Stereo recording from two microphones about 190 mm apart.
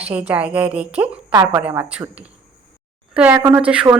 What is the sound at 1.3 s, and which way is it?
Speech, 20° right (ahead or behind).